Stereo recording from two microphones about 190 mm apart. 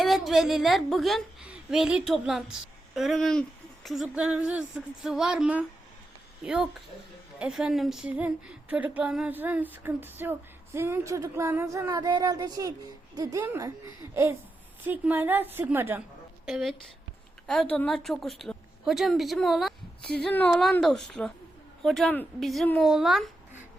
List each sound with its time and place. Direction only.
0.0 s a woman's voice: centre (ahead or behind)